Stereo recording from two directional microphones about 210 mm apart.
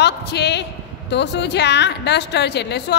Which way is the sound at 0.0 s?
55° left (ahead or behind).